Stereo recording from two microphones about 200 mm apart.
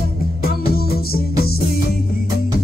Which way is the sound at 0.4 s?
50° left (ahead or behind).